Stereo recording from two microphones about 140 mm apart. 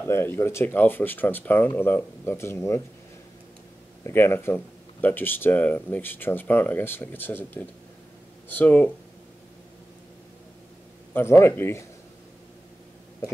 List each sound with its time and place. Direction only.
0.0 s speech: 15° left (ahead or behind)
4.0 s speech: 20° left (ahead or behind)
11.1 s speech: 20° left (ahead or behind)